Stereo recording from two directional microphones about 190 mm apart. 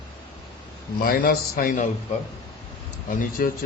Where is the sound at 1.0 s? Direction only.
50° left (ahead or behind).